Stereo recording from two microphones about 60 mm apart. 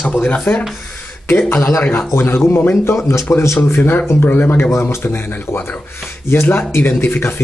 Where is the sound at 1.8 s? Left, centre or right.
Left.